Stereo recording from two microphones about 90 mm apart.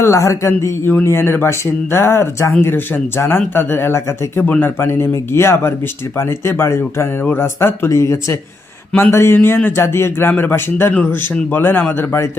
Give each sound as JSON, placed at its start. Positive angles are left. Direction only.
{"t": 0.0, "sound": "speech", "side_deg": 35}